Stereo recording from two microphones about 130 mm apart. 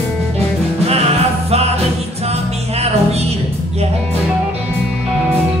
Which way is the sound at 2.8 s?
55° right (ahead or behind).